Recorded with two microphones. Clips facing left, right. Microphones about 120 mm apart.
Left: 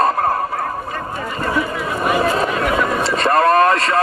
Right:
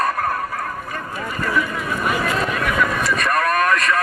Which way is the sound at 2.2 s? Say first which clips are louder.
Left 4 dB; 30° left (ahead or behind).